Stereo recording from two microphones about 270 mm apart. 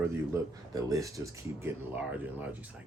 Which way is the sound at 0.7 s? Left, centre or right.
Centre.